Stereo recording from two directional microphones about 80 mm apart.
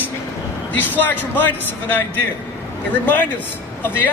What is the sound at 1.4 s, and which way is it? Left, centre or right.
Speech, left.